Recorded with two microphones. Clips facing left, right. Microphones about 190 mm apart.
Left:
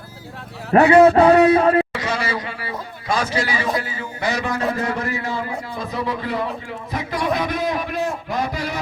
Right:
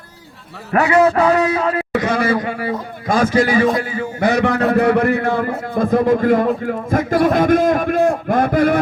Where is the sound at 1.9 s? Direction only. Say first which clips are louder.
Right 7 dB; 55° right (ahead or behind).